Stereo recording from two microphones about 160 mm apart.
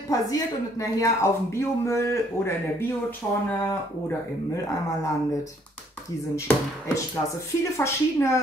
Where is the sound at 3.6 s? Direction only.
10° left (ahead or behind).